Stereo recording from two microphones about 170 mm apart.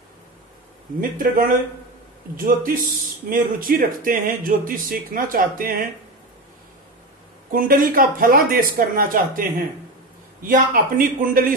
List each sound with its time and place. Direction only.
1.1 s speech: 55° right (ahead or behind)
7.5 s speech: 55° right (ahead or behind)